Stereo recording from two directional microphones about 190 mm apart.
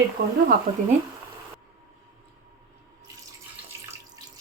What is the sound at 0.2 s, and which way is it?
Speech, 50° right (ahead or behind).